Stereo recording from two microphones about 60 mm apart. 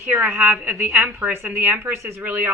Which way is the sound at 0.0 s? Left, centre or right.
Right.